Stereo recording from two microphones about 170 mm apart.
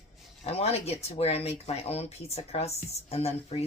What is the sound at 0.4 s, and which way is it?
Speech, 35° left (ahead or behind).